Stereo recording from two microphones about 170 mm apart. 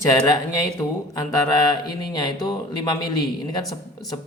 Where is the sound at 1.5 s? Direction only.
20° left (ahead or behind).